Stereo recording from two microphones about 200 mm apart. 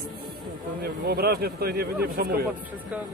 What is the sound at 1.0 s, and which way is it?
Speech, 50° right (ahead or behind).